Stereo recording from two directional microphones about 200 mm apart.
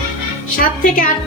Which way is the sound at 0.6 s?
45° left (ahead or behind).